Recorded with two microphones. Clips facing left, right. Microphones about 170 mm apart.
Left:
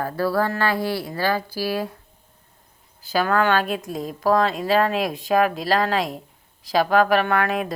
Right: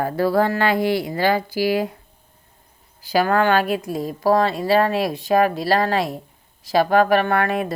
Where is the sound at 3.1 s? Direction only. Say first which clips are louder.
Right 2 dB; 10° right (ahead or behind).